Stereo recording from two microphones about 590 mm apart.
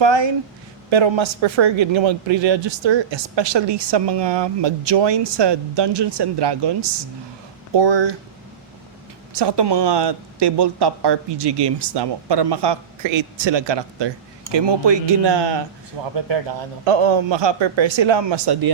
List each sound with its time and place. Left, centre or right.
0.0 s a man's voice: right
9.3 s a man's voice: right
16.8 s a man's voice: right